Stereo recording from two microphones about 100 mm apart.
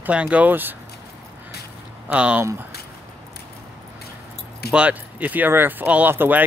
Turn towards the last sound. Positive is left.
turn(degrees=-20)  # may be behind; listen again after turning